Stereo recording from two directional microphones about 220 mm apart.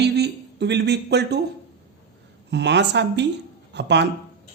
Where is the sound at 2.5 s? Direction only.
50° right (ahead or behind).